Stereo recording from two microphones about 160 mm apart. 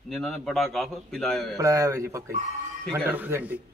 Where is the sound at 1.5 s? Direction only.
20° right (ahead or behind).